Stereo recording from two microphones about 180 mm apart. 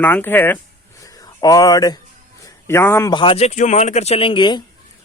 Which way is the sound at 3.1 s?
30° left (ahead or behind).